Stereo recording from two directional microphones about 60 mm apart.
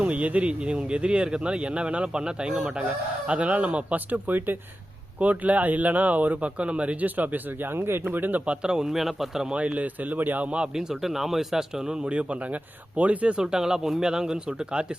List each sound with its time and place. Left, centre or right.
0.0 s speech: right
8.0 s speech: right
8.4 s speech: centre
9.6 s speech: right